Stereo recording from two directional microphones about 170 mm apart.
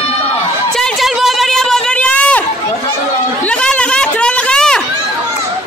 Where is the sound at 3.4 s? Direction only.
5° left (ahead or behind).